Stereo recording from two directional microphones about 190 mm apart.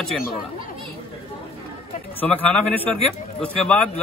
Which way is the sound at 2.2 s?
5° left (ahead or behind).